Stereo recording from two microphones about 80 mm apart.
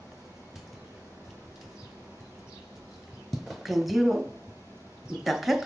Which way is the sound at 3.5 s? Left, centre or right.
Centre.